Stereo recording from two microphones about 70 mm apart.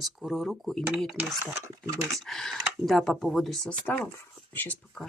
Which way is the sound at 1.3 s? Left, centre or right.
Right.